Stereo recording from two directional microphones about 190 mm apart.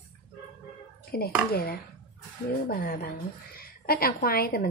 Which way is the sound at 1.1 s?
55° left (ahead or behind).